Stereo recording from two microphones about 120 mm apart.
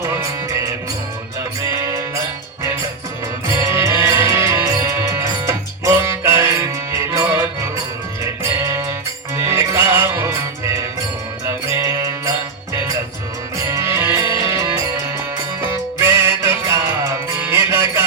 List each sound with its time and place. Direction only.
0.0 s music: 25° right (ahead or behind)
3.5 s music: 25° right (ahead or behind)
11.4 s music: 25° right (ahead or behind)
13.6 s music: 30° right (ahead or behind)